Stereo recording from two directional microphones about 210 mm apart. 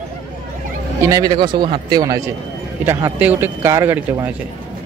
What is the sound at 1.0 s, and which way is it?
A man's voice, 15° right (ahead or behind).